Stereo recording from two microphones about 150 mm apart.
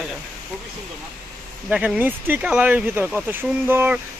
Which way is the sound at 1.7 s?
10° right (ahead or behind).